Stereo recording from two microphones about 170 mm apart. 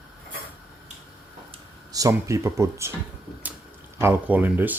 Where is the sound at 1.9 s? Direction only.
20° right (ahead or behind).